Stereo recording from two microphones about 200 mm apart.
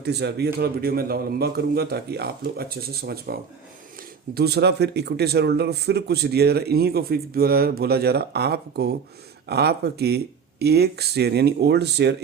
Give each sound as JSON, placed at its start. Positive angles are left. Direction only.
{"t": 0.0, "sound": "a man's voice", "side_deg": -55}